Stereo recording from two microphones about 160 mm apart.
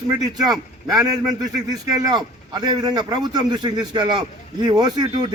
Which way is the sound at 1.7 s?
25° right (ahead or behind).